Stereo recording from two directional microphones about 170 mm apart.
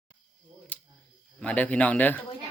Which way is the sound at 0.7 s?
10° left (ahead or behind).